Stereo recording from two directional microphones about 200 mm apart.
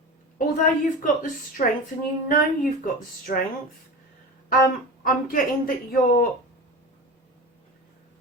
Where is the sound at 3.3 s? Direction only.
40° left (ahead or behind).